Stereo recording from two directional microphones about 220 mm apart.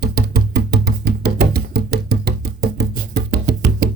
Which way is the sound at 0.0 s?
45° right (ahead or behind).